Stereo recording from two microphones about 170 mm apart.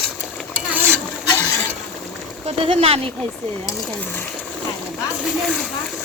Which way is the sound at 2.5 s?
35° right (ahead or behind).